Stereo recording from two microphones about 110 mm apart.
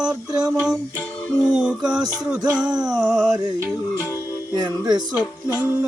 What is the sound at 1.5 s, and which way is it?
Music, 5° right (ahead or behind).